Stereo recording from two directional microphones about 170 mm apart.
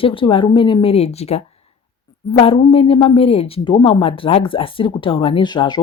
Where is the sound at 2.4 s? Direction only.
35° left (ahead or behind).